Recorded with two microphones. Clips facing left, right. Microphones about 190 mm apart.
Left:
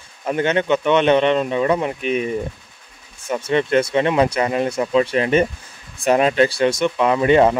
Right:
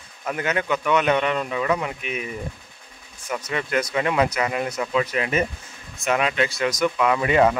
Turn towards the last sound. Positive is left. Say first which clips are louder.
# left 4 dB
turn(degrees=30)  # may be behind; listen again after turning